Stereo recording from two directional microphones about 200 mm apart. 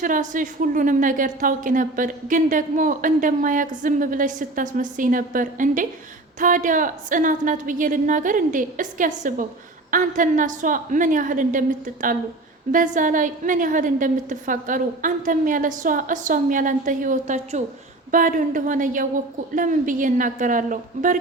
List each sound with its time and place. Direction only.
0.0 s a woman's voice: 40° right (ahead or behind)